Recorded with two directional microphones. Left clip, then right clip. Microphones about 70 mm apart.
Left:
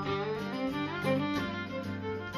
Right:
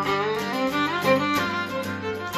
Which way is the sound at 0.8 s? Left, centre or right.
Right.